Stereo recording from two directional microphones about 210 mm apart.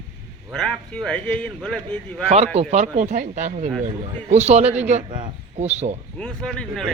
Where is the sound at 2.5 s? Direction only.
30° right (ahead or behind).